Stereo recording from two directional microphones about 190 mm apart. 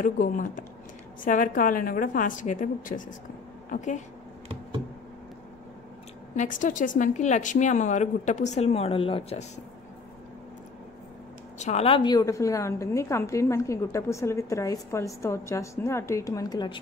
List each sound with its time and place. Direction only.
0.0 s a woman's voice: 45° left (ahead or behind)
6.3 s a woman's voice: 40° left (ahead or behind)
11.5 s a woman's voice: 35° left (ahead or behind)